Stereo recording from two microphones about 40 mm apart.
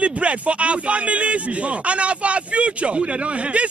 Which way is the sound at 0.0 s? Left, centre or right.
Right.